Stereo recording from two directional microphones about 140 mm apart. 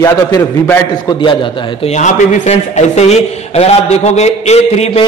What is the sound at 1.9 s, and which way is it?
A man's voice, 65° left (ahead or behind).